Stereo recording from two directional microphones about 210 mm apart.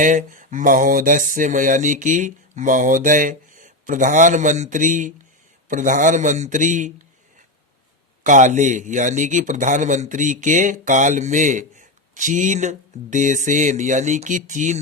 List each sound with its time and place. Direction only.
0.0 s a man's voice: 40° right (ahead or behind)
8.2 s a man's voice: 35° right (ahead or behind)